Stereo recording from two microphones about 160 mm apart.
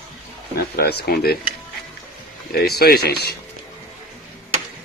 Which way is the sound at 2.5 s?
80° left.